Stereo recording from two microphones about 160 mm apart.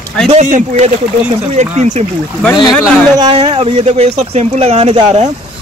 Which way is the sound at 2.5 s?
25° left (ahead or behind).